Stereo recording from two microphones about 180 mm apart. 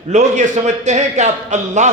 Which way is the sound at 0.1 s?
40° right (ahead or behind).